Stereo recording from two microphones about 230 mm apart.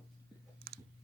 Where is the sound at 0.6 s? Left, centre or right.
Right.